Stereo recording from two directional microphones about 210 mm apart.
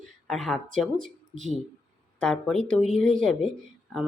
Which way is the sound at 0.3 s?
Centre (ahead or behind).